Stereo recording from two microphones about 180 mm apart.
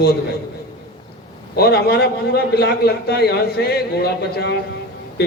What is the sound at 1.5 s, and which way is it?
A man's voice, 60° left (ahead or behind).